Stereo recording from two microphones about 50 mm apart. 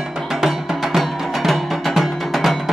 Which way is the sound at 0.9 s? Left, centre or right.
Centre.